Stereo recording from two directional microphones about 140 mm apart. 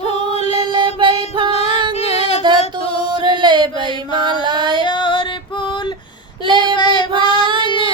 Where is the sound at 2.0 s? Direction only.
50° left (ahead or behind).